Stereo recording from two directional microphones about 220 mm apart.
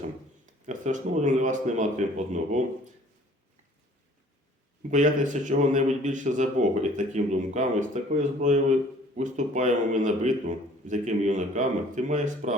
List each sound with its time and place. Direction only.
0.4 s a man's voice: 35° right (ahead or behind)
4.8 s a man's voice: 35° right (ahead or behind)